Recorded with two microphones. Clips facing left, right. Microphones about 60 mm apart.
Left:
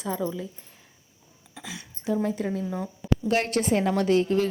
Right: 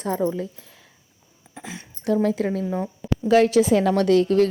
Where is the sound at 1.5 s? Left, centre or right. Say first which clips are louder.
Right 3 dB; right.